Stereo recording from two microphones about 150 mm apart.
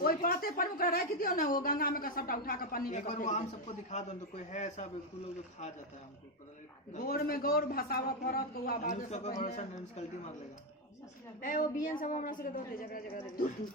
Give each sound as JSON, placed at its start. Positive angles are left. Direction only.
{"t": 0.0, "sound": "a man's voice", "side_deg": 75}
{"t": 7.0, "sound": "speech", "side_deg": 80}
{"t": 11.3, "sound": "a woman's voice", "side_deg": 65}